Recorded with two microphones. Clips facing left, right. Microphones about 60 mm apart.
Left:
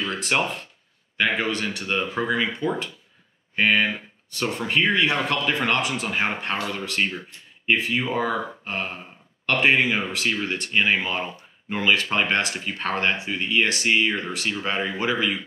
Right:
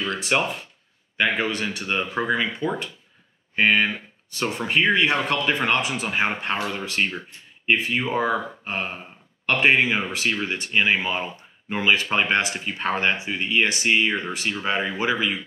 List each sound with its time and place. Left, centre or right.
0.2 s speech: centre
1.4 s speech: centre